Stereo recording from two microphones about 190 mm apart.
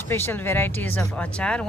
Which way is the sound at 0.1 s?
10° left (ahead or behind).